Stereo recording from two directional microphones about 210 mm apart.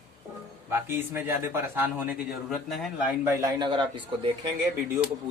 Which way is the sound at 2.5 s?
Centre (ahead or behind).